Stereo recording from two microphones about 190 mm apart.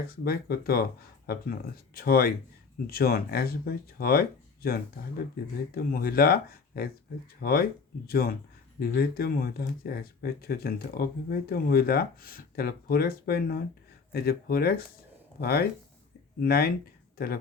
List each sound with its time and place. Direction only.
0.1 s speech: 55° left (ahead or behind)